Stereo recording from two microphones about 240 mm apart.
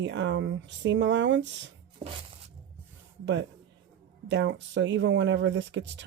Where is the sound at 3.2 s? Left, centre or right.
Right.